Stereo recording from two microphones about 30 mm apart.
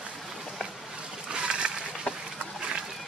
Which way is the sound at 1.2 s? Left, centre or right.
Right.